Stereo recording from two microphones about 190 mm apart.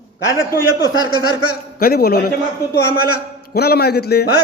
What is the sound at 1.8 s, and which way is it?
Speech, 55° left (ahead or behind).